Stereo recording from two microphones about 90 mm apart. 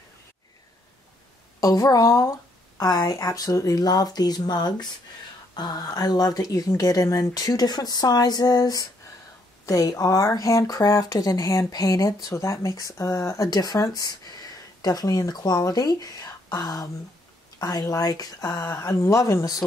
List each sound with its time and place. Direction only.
1.6 s speech: 40° left (ahead or behind)